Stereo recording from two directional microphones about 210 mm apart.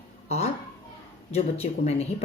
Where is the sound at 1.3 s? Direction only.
30° left (ahead or behind).